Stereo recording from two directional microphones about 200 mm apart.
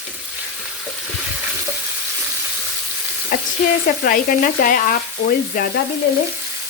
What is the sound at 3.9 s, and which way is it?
Frying, 40° left (ahead or behind).